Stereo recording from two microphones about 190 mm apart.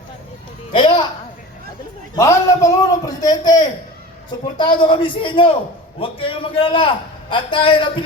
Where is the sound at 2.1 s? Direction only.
15° left (ahead or behind).